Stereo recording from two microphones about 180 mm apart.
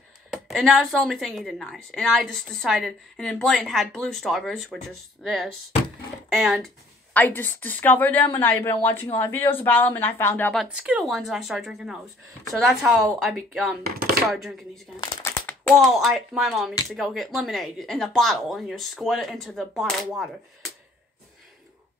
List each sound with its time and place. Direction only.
0.3 s a woman's voice: centre (ahead or behind)
7.2 s a woman's voice: 10° left (ahead or behind)
15.2 s a sound: 15° left (ahead or behind)
15.7 s a woman's voice: centre (ahead or behind)